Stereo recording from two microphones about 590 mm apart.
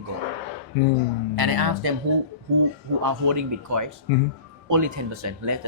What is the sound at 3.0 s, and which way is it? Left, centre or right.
Speech, right.